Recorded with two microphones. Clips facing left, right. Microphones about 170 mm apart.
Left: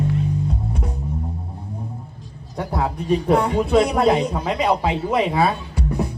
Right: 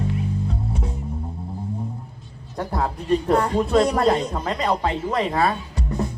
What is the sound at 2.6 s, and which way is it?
Speech, 5° left (ahead or behind).